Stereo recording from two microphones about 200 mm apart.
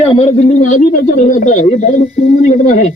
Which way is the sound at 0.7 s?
40° left (ahead or behind).